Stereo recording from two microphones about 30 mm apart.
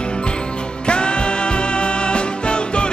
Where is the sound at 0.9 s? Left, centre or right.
Left.